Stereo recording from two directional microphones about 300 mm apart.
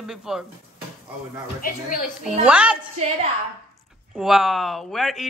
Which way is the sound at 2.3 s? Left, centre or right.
Centre.